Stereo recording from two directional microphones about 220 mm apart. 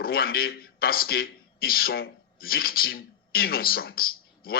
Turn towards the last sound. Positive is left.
turn(degrees=45)  # may be behind; listen again after turning